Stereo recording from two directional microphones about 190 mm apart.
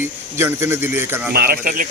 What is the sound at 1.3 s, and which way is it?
Speech, 55° right (ahead or behind).